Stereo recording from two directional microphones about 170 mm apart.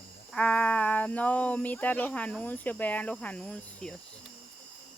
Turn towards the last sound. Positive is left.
turn(degrees=5)  # may be behind; listen again after turning